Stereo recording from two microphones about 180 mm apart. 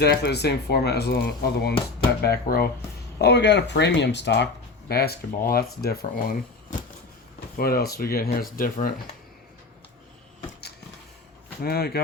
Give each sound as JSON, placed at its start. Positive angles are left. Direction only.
{"t": 0.0, "sound": "speech", "side_deg": 65}
{"t": 3.2, "sound": "speech", "side_deg": 70}
{"t": 4.9, "sound": "speech", "side_deg": 60}
{"t": 11.6, "sound": "speech", "side_deg": 60}